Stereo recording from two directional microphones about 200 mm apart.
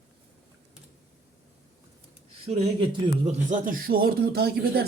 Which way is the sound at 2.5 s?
30° right (ahead or behind).